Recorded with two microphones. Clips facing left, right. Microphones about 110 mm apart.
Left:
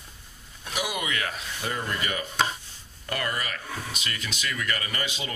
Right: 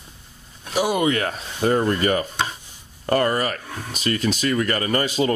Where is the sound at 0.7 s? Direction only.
35° right (ahead or behind).